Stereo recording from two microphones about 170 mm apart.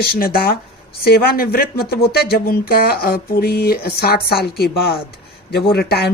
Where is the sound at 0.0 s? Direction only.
65° left (ahead or behind).